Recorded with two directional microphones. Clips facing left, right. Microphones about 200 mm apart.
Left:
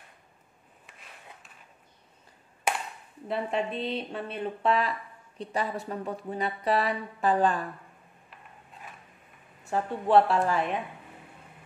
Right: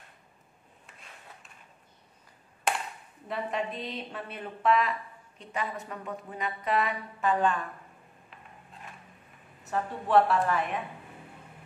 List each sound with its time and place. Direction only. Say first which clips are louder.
0.8 s a sound: left 1 dB; centre (ahead or behind)
3.3 s speech: left 3 dB; 30° left (ahead or behind)
9.7 s speech: left 3 dB; 30° left (ahead or behind)